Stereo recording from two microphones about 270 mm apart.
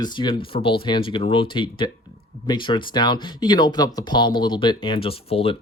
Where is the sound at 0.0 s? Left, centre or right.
Centre.